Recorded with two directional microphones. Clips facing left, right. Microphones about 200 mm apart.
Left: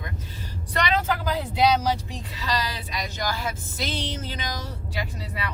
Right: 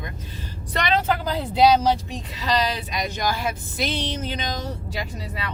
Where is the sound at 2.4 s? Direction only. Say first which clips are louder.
Right 6 dB; 20° right (ahead or behind).